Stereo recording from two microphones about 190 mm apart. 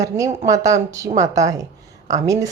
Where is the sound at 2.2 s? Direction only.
20° right (ahead or behind).